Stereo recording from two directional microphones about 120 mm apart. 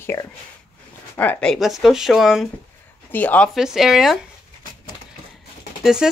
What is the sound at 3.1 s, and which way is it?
Speech, 10° left (ahead or behind).